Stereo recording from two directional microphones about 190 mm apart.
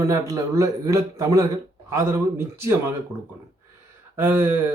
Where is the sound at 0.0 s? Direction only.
15° right (ahead or behind).